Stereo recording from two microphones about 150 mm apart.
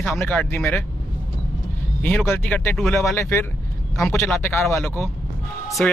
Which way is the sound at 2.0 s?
10° left (ahead or behind).